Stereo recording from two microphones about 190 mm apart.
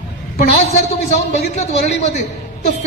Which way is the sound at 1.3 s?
35° left (ahead or behind).